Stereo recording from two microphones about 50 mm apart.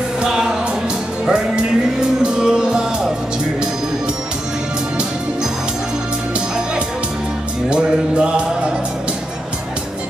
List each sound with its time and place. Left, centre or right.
0.2 s music: centre
7.7 s music: centre